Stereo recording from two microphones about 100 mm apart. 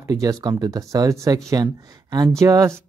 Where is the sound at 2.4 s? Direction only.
35° right (ahead or behind).